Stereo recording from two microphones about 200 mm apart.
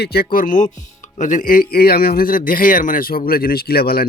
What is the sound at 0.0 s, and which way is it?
A man's voice, 50° left (ahead or behind).